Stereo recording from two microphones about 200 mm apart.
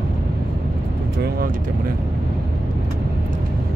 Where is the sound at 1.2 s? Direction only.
50° right (ahead or behind).